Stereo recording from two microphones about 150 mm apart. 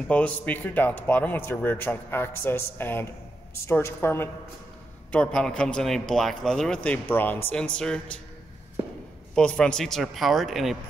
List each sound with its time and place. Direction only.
0.1 s a man's voice: 10° left (ahead or behind)
9.3 s a man's voice: 5° left (ahead or behind)